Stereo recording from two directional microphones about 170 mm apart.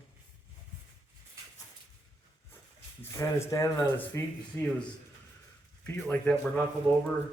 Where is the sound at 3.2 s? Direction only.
20° left (ahead or behind).